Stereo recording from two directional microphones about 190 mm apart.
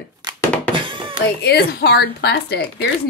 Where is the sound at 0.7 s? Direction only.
25° right (ahead or behind).